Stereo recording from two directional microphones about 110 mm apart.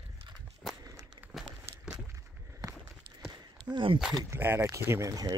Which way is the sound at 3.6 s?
45° right (ahead or behind).